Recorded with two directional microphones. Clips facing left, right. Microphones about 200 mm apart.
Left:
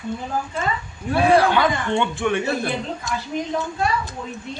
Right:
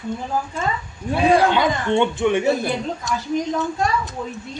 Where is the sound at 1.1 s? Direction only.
20° right (ahead or behind).